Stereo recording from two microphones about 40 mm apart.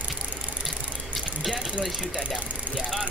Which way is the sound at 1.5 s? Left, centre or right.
Right.